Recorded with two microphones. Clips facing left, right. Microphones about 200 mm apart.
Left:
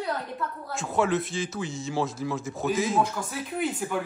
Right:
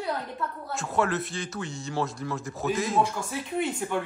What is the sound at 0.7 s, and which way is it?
Speech, centre (ahead or behind).